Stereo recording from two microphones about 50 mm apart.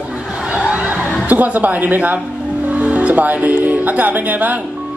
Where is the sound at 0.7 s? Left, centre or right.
Right.